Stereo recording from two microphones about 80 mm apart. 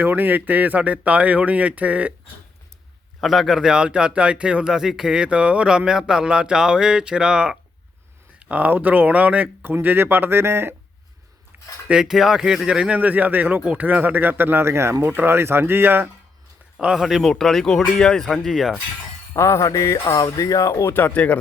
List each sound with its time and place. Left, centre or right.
0.0 s speech: right
3.2 s speech: centre; by 10.8 s right
11.5 s dishes: right
11.9 s speech: centre; by 16.0 s right
16.7 s speech: centre
19.3 s a sound: left
19.6 s speech: left
21.1 s speech: centre